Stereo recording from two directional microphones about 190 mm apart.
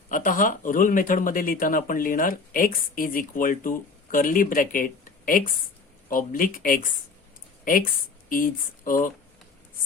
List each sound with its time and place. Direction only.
0.1 s speech: 45° left (ahead or behind)